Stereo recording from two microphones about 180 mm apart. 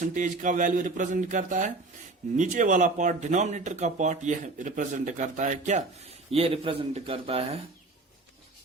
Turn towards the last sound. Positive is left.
turn(degrees=-30)  # may be behind; listen again after turning